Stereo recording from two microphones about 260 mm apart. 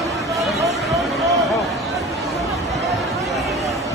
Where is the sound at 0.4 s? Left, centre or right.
Centre.